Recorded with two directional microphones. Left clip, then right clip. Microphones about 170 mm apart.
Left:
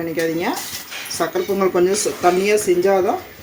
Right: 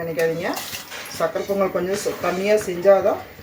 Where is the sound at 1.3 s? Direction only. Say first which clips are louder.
Left 5 dB; 65° left (ahead or behind).